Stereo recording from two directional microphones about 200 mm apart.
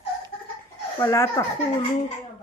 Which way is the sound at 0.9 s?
15° left (ahead or behind).